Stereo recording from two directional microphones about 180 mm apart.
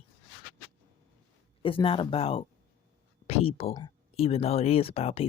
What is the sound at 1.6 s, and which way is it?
Speech, 30° left (ahead or behind).